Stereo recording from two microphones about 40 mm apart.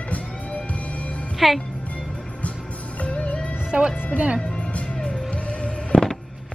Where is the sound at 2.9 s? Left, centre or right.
Left.